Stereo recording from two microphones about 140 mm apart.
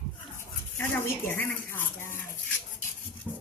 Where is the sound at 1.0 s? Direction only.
15° left (ahead or behind).